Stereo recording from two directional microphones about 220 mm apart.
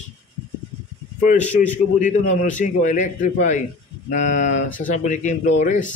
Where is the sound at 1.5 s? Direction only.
35° left (ahead or behind).